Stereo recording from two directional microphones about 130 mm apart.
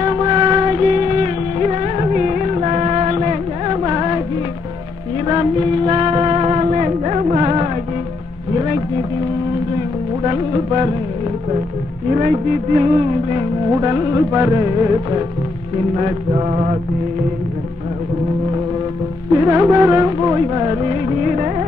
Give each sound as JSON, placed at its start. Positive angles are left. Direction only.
{"t": 0.0, "sound": "music", "side_deg": -30}
{"t": 3.6, "sound": "music", "side_deg": -35}
{"t": 5.2, "sound": "music", "side_deg": -30}
{"t": 5.7, "sound": "music", "side_deg": -45}
{"t": 8.5, "sound": "a sound", "side_deg": -35}
{"t": 9.7, "sound": "music", "side_deg": -30}
{"t": 12.1, "sound": "a sound", "side_deg": -90}
{"t": 13.7, "sound": "music", "side_deg": -25}
{"t": 15.9, "sound": "mantra", "side_deg": -50}
{"t": 19.3, "sound": "music", "side_deg": -20}